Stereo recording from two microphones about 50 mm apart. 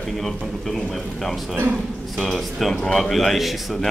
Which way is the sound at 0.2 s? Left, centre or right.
Centre.